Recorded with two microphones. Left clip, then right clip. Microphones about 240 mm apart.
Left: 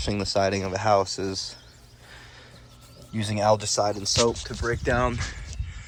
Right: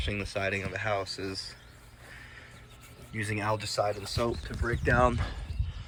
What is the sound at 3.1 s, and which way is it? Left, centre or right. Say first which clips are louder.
Speech: left 9 dB; centre.